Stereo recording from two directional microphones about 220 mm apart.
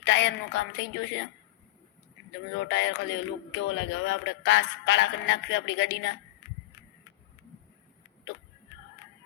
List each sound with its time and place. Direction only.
0.0 s a man's voice: 55° left (ahead or behind)
2.6 s a man's voice: 55° left (ahead or behind)